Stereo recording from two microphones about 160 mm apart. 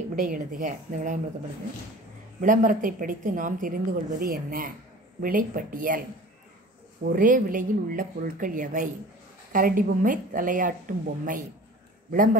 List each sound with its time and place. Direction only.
0.1 s a woman's voice: 55° right (ahead or behind)
2.4 s a woman's voice: 55° right (ahead or behind)
7.1 s a woman's voice: 55° right (ahead or behind)